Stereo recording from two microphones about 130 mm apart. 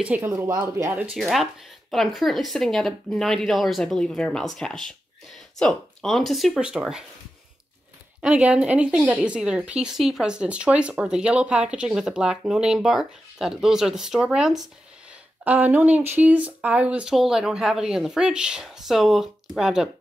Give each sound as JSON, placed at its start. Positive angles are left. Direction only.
{"t": 0.0, "sound": "speech", "side_deg": -15}
{"t": 1.1, "sound": "speech", "side_deg": 0}
{"t": 8.2, "sound": "speech", "side_deg": -10}
{"t": 15.4, "sound": "speech", "side_deg": -15}